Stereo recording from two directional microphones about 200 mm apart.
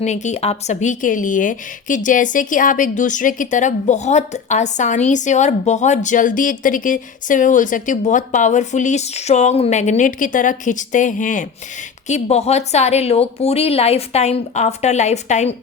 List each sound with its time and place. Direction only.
0.0 s a woman's voice: 35° left (ahead or behind)